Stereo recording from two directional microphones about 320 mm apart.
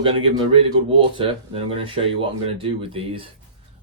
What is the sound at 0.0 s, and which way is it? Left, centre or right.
Speech, centre.